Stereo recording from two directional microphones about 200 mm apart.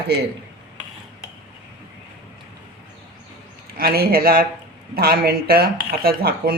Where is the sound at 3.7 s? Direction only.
50° right (ahead or behind).